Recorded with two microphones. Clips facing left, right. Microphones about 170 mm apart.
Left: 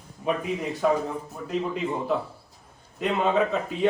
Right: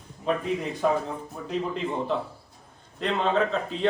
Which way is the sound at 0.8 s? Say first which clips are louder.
Left 2 dB; centre (ahead or behind).